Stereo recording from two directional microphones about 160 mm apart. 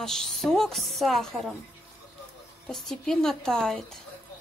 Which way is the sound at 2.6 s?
Centre (ahead or behind).